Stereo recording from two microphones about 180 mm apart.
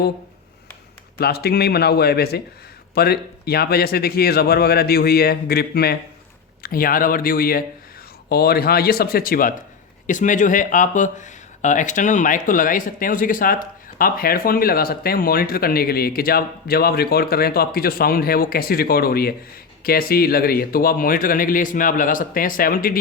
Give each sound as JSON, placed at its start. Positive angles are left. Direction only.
{"t": 1.2, "sound": "speech", "side_deg": 60}